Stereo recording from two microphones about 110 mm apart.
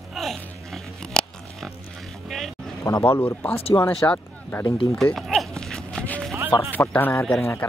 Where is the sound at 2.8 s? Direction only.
25° left (ahead or behind).